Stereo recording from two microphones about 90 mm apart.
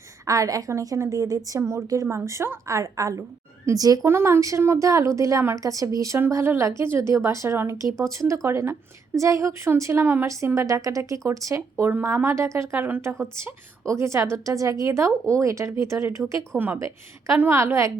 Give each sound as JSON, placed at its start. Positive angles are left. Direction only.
{"t": 0.3, "sound": "a woman's voice", "side_deg": -40}
{"t": 4.0, "sound": "a woman's voice", "side_deg": -25}
{"t": 6.1, "sound": "a woman's voice", "side_deg": -25}
{"t": 11.9, "sound": "a woman's voice", "side_deg": -25}
{"t": 16.6, "sound": "a woman's voice", "side_deg": -20}